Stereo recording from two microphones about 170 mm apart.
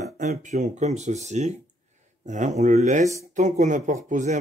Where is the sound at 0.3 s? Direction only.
45° right (ahead or behind).